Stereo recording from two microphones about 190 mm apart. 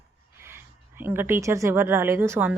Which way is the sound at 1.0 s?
10° right (ahead or behind).